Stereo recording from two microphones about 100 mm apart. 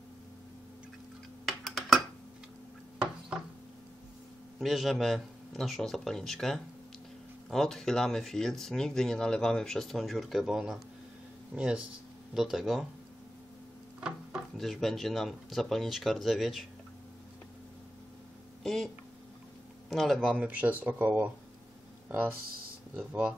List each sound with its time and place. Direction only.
1.5 s a sound: centre (ahead or behind)
4.6 s speech: centre (ahead or behind)
14.0 s speech: 5° right (ahead or behind)
18.6 s speech: 5° left (ahead or behind)
19.9 s speech: centre (ahead or behind)
20.3 s speech: 15° right (ahead or behind)